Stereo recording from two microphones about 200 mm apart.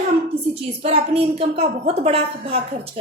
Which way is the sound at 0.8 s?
30° right (ahead or behind).